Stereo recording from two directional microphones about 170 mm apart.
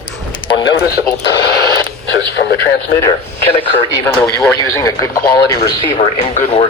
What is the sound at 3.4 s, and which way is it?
Speech, 35° left (ahead or behind).